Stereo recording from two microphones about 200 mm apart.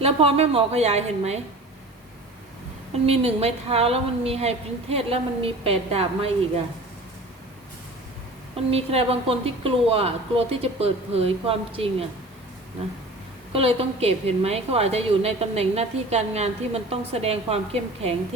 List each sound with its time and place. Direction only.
0.0 s a woman's voice: 30° right (ahead or behind)
3.1 s a woman's voice: 30° right (ahead or behind)
8.7 s a woman's voice: 30° right (ahead or behind)
13.5 s a woman's voice: 30° right (ahead or behind)